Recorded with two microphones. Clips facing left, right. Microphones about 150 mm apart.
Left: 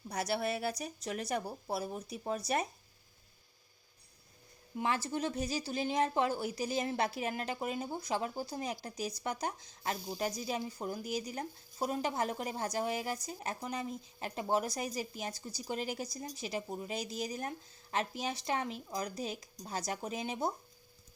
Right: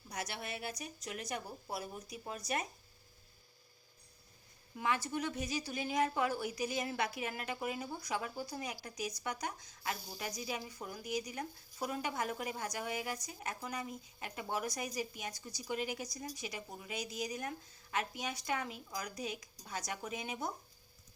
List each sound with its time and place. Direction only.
0.1 s speech: 35° left (ahead or behind)
4.8 s speech: 30° left (ahead or behind)